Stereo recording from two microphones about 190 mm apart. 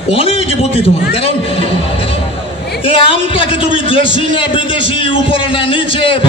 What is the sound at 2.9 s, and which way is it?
Speech, 30° left (ahead or behind).